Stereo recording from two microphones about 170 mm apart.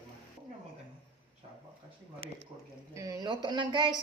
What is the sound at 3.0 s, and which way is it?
Speech, 20° right (ahead or behind).